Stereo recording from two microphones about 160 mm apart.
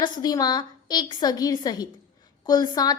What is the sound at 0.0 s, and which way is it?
A woman's voice, 25° left (ahead or behind).